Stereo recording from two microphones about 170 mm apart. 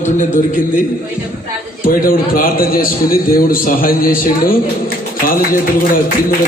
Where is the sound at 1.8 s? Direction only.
55° left (ahead or behind).